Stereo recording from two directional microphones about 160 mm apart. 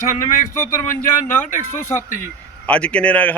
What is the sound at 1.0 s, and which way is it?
Speech, 55° left (ahead or behind).